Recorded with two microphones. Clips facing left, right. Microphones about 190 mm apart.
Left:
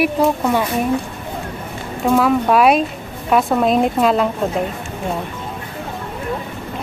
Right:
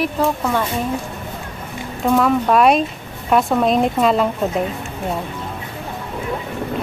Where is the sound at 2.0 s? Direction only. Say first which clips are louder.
Left 1 dB; centre (ahead or behind).